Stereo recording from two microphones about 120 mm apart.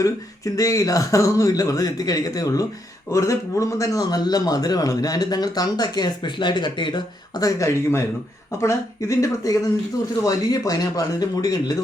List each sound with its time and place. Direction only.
0.5 s a man's voice: 30° left (ahead or behind)